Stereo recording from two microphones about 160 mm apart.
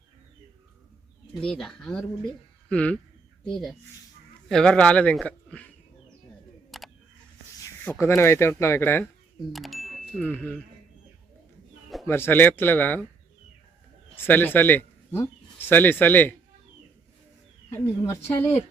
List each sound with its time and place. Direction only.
1.3 s speech: centre (ahead or behind)
6.7 s a sound: centre (ahead or behind)
7.6 s speech: 15° left (ahead or behind)
9.5 s a sound: centre (ahead or behind)
10.2 s speech: 10° left (ahead or behind)
12.0 s speech: 15° left (ahead or behind)
14.2 s speech: 10° left (ahead or behind)
17.7 s speech: 15° left (ahead or behind)